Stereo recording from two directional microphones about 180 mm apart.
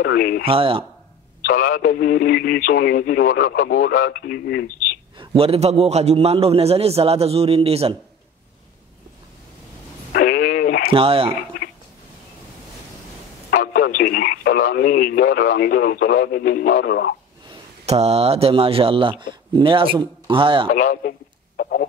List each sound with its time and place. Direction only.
0.0 s speech: 55° left (ahead or behind)
0.5 s a man's voice: 30° right (ahead or behind)
1.4 s speech: 50° left (ahead or behind)
5.1 s a man's voice: 30° right (ahead or behind)
10.1 s radio: 60° left (ahead or behind)
10.9 s a man's voice: 30° right (ahead or behind)
13.5 s speech: 50° left (ahead or behind); by 17.1 s 70° left (ahead or behind)
17.5 s speech: 35° right (ahead or behind)
20.7 s speech: 45° left (ahead or behind)
21.5 s a sound: 55° left (ahead or behind)